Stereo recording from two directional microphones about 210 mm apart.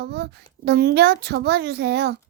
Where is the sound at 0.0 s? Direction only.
50° right (ahead or behind).